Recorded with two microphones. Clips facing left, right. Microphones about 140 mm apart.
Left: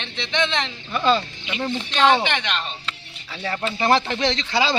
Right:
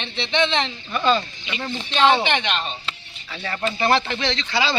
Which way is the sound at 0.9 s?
10° left (ahead or behind).